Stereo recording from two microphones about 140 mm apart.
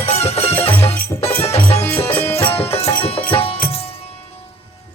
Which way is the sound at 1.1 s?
30° left (ahead or behind).